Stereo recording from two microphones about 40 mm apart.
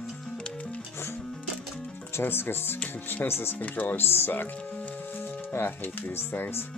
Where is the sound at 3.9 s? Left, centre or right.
Left.